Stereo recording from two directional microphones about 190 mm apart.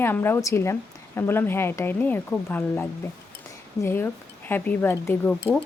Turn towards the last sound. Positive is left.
turn(degrees=10)  # may be behind; listen again after turning